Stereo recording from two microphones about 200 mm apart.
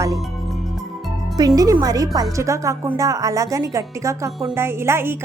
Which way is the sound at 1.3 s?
20° right (ahead or behind).